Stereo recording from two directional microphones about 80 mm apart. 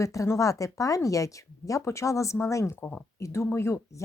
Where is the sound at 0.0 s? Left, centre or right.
Left.